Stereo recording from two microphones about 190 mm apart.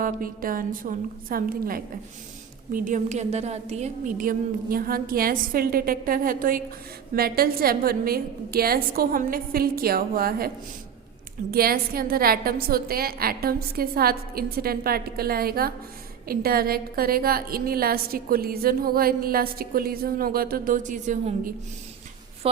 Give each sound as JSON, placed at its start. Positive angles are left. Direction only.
{"t": 0.0, "sound": "a woman's voice", "side_deg": -50}
{"t": 11.5, "sound": "a woman's voice", "side_deg": -50}